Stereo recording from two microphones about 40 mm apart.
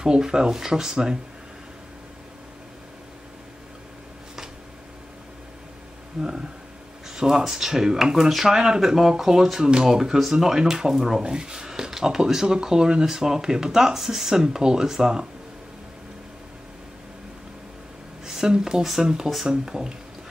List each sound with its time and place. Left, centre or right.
0.0 s speech: centre
6.2 s speech: centre
18.2 s speech: centre